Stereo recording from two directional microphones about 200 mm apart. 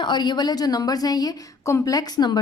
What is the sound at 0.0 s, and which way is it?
A woman's voice, 20° left (ahead or behind).